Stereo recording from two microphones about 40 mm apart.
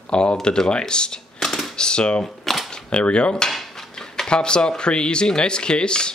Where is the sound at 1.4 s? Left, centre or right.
Centre.